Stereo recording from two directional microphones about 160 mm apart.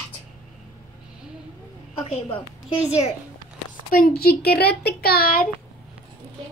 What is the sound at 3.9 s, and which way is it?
Speech, 70° left (ahead or behind).